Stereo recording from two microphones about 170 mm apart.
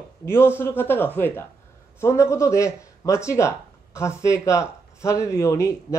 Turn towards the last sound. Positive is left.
turn(degrees=15)  # may be behind; listen again after turning